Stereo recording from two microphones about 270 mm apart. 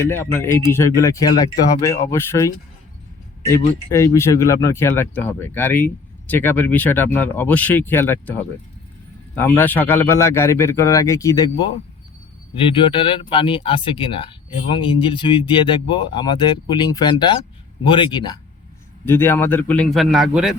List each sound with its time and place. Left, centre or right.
0.1 s speech: centre
9.3 s speech: centre
12.7 s a man's voice: centre